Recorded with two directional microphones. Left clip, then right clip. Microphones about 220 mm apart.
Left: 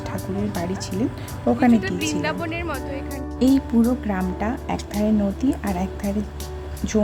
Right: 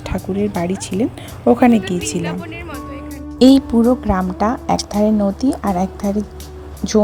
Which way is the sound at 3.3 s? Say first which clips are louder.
Right 9 dB; 25° right (ahead or behind).